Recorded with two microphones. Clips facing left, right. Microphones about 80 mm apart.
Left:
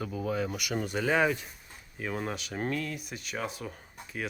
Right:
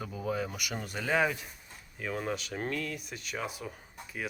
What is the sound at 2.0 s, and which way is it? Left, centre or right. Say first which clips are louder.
Speech: even; centre.